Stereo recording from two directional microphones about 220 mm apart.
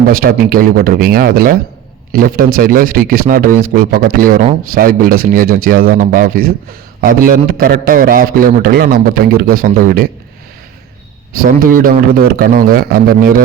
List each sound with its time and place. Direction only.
0.1 s speech: 40° right (ahead or behind)
11.7 s speech: 40° right (ahead or behind)